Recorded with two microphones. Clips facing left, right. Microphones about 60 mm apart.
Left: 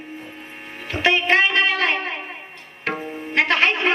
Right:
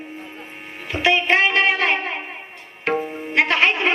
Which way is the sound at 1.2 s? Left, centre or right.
Right.